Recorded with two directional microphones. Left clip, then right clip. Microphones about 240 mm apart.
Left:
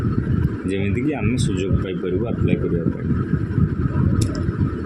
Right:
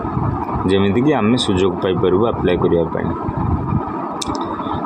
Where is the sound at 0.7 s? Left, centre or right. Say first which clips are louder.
Right 8 dB; centre.